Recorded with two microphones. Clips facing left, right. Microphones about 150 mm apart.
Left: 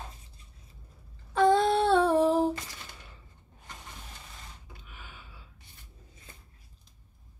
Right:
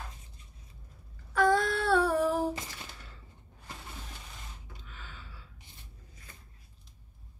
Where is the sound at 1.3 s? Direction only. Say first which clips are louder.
Left 4 dB; 25° left (ahead or behind).